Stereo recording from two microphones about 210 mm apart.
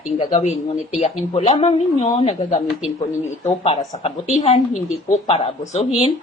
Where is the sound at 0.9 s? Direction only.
30° left (ahead or behind).